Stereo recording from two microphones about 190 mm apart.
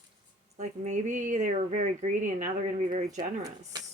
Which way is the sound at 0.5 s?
40° right (ahead or behind).